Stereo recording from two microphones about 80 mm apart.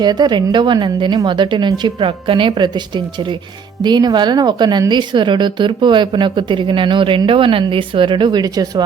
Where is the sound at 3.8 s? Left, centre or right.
Right.